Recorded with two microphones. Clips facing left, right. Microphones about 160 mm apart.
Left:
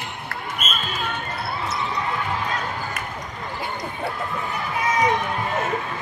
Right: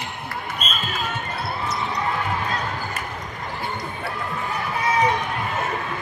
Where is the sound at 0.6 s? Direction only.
35° right (ahead or behind).